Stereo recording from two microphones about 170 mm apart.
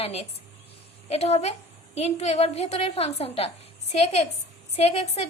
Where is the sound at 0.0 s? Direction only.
35° left (ahead or behind).